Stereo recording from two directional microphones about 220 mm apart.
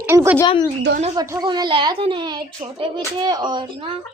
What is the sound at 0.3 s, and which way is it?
Speech, 20° left (ahead or behind).